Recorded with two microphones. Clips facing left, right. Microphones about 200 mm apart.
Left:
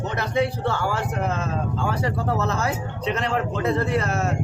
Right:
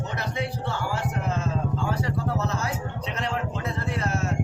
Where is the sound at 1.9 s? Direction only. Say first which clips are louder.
Left 3 dB; 70° left (ahead or behind).